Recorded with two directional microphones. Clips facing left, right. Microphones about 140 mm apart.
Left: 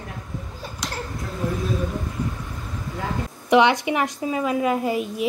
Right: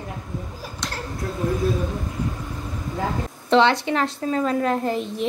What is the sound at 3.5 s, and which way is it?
Speech, 15° left (ahead or behind).